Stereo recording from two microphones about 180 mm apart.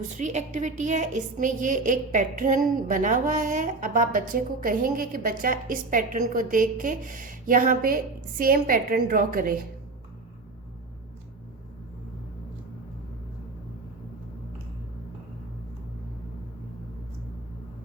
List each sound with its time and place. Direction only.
0.1 s a woman's voice: 40° right (ahead or behind)